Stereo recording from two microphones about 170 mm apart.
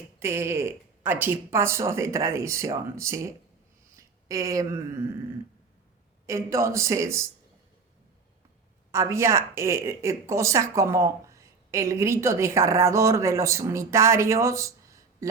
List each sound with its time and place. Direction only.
0.2 s a woman's voice: 15° right (ahead or behind)
6.2 s a woman's voice: 15° right (ahead or behind)
8.9 s a woman's voice: 15° right (ahead or behind)